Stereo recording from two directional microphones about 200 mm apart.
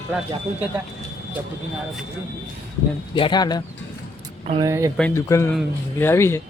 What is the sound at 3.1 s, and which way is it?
Speech, 20° left (ahead or behind).